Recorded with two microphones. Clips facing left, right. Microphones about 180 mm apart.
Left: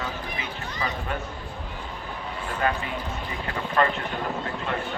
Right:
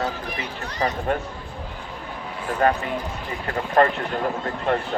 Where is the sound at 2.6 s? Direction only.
45° right (ahead or behind).